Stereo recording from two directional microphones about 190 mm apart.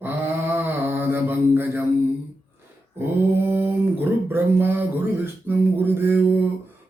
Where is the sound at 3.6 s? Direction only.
10° right (ahead or behind).